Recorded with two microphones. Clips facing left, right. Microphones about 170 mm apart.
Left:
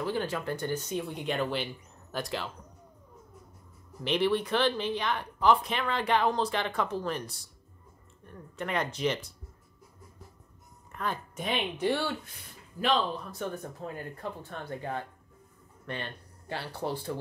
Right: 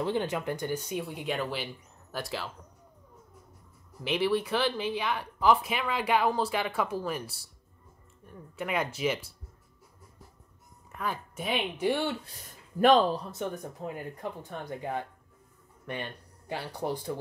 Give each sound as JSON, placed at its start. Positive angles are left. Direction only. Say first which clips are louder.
{"t": 0.0, "sound": "speech", "louder": "right 2 dB", "side_deg": -20}
{"t": 4.0, "sound": "speech", "louder": "even", "side_deg": -5}
{"t": 11.0, "sound": "speech", "louder": "even", "side_deg": -5}
{"t": 12.3, "sound": "speech", "louder": "right 1 dB", "side_deg": -45}
{"t": 13.3, "sound": "speech", "louder": "right 1 dB", "side_deg": -15}